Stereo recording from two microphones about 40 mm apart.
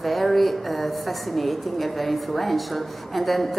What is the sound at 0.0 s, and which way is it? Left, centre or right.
A woman's voice, centre.